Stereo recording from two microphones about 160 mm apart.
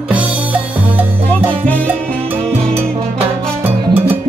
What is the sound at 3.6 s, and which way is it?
Music, 10° right (ahead or behind).